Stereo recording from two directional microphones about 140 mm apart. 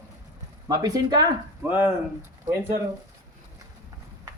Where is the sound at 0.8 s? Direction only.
25° right (ahead or behind).